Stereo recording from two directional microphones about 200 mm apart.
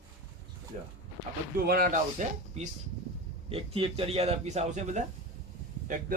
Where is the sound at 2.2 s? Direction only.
40° right (ahead or behind).